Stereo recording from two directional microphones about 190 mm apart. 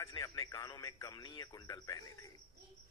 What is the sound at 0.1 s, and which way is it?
A man's voice, 15° left (ahead or behind).